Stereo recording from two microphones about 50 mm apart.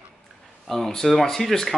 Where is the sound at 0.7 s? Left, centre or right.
Centre.